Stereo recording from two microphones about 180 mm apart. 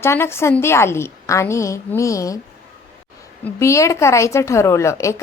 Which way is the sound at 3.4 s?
15° left (ahead or behind).